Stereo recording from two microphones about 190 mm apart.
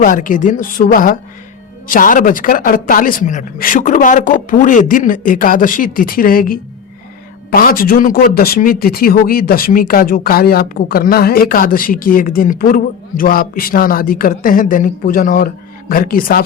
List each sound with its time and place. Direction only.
0.0 s speech: 45° left (ahead or behind)